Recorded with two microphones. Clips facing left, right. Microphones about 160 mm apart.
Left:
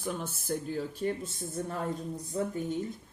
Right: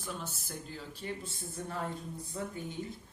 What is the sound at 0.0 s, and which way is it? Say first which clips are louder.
Speech: left 6 dB; 55° left (ahead or behind).